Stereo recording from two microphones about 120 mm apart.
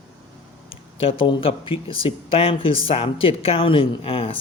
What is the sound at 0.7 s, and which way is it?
Speech, 50° left (ahead or behind).